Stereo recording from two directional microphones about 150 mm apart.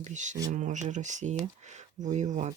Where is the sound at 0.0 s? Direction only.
55° right (ahead or behind).